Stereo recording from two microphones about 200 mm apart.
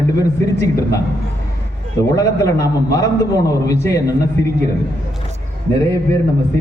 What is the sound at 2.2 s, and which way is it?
A man's voice, 15° left (ahead or behind).